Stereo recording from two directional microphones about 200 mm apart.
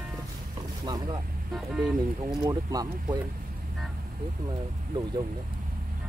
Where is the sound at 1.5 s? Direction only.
Centre (ahead or behind).